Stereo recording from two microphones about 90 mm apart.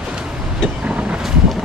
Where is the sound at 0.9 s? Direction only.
15° right (ahead or behind).